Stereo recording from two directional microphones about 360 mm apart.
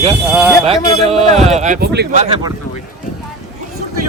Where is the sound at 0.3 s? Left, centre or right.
Centre.